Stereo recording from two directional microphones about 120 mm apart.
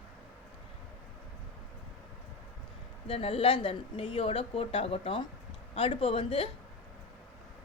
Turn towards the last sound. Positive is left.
turn(degrees=50)  # may be behind; listen again after turning